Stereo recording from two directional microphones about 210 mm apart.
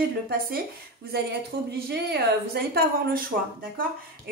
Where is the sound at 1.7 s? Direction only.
50° right (ahead or behind).